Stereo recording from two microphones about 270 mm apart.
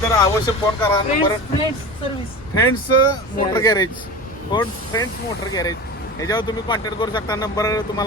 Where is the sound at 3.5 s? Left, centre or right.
Centre.